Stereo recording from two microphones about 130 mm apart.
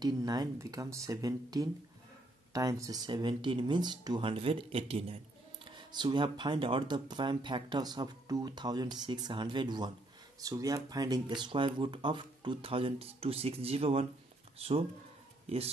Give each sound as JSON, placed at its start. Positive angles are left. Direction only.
{"t": 0.0, "sound": "speech", "side_deg": -30}
{"t": 3.1, "sound": "speech", "side_deg": -40}
{"t": 5.7, "sound": "speech", "side_deg": -35}